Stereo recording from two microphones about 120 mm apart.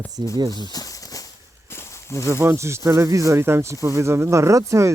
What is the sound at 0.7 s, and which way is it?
Snake, 30° left (ahead or behind).